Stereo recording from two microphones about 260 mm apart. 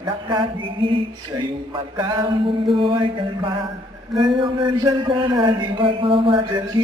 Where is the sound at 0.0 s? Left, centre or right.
Centre.